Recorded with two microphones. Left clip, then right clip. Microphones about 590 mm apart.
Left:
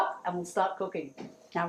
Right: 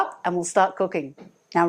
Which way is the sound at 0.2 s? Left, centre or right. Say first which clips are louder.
Right 9 dB; right.